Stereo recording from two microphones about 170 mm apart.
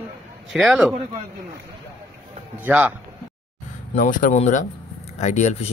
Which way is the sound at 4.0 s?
50° left (ahead or behind).